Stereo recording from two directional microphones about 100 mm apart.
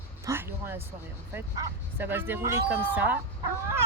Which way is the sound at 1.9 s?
20° right (ahead or behind).